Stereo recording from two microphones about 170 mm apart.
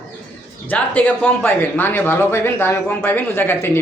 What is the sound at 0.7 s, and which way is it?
Speech, 10° left (ahead or behind).